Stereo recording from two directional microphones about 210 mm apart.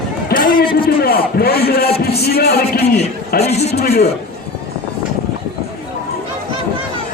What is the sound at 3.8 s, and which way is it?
Speech, 50° left (ahead or behind).